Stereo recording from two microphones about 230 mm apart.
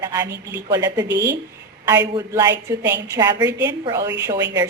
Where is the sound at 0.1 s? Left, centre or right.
Centre.